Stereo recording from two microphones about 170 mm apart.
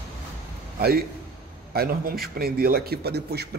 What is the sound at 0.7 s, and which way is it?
A man's voice, 65° right (ahead or behind).